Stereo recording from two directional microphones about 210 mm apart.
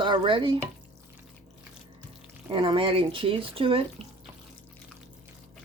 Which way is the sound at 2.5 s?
25° right (ahead or behind).